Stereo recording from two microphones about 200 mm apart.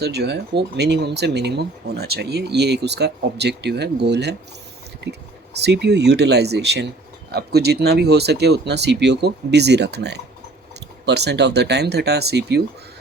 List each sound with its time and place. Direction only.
0.0 s speech: 55° right (ahead or behind)
5.6 s speech: 55° right (ahead or behind)